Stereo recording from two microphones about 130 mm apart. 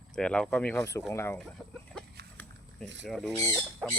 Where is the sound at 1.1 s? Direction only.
20° left (ahead or behind).